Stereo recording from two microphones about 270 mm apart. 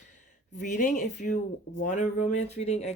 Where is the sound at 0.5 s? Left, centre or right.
Left.